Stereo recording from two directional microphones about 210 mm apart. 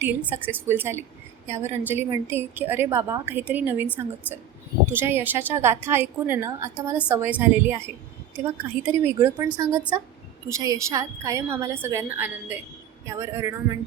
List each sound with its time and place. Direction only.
0.0 s a woman's voice: 10° right (ahead or behind)
4.9 s a woman's voice: 10° right (ahead or behind)
10.5 s a woman's voice: 15° right (ahead or behind)